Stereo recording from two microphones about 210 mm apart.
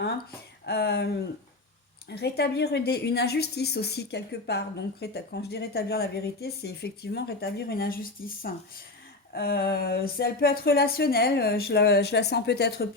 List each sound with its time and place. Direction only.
0.0 s a woman's voice: 50° left (ahead or behind)